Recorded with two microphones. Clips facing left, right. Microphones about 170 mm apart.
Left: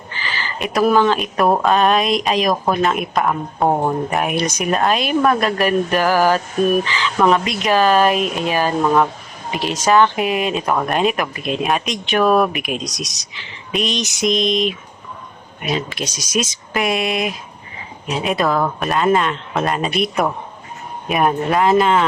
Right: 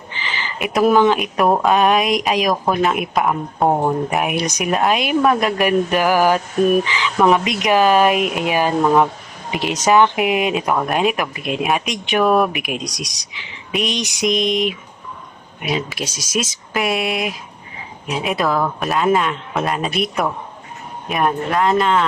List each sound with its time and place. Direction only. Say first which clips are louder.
0.1 s a sound: left 1 dB; 20° right (ahead or behind)
0.7 s speech: right 1 dB; 20° right (ahead or behind)
1.5 s speech: even; centre (ahead or behind)
1.7 s speech: even; 15° right (ahead or behind); by 22.0 s 5° left (ahead or behind)